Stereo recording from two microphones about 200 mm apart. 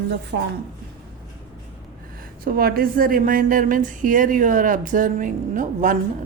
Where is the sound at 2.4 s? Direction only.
50° right (ahead or behind).